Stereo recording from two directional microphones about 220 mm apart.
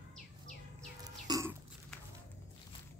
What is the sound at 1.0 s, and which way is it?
Burping, 15° right (ahead or behind).